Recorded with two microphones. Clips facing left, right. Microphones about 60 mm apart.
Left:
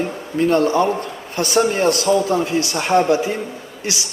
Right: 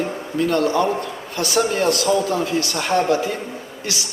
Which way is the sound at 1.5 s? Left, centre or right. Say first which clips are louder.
Left 2 dB; left.